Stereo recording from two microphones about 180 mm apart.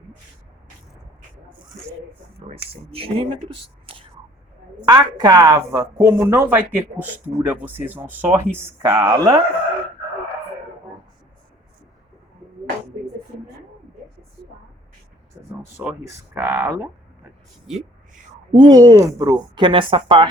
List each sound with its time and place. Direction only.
2.5 s speech: 30° right (ahead or behind)
15.8 s speech: 10° right (ahead or behind)
18.5 s a woman's voice: 25° right (ahead or behind)